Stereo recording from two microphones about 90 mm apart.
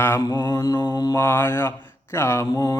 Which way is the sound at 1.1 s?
25° left (ahead or behind).